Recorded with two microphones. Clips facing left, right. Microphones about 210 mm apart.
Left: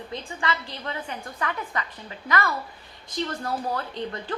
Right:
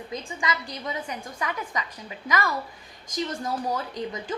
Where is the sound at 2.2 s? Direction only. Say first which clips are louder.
Left 1 dB; 15° right (ahead or behind).